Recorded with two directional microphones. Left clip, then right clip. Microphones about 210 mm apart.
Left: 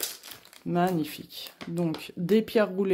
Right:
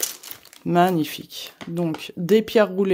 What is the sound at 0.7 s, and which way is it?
Speech, 35° right (ahead or behind).